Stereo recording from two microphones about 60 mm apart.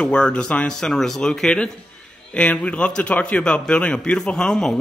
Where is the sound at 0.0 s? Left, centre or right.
Centre.